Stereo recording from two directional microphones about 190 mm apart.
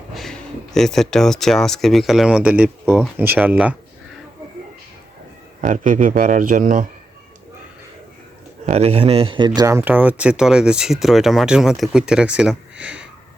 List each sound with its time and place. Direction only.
0.1 s speech: centre (ahead or behind)
5.6 s speech: 40° right (ahead or behind)
8.6 s speech: 35° right (ahead or behind)
9.6 s speech: 15° right (ahead or behind)